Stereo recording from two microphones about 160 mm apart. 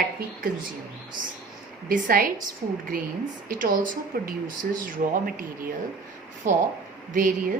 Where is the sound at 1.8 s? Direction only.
60° right (ahead or behind).